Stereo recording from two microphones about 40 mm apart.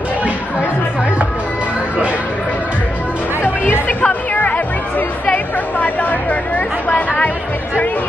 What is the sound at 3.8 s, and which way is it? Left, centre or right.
Music, left.